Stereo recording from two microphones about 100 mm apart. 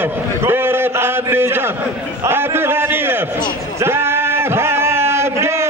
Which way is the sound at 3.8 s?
25° right (ahead or behind).